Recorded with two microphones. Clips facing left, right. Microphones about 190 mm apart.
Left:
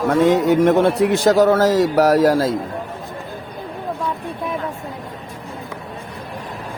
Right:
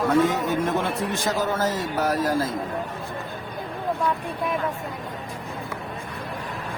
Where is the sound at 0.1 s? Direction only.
85° left.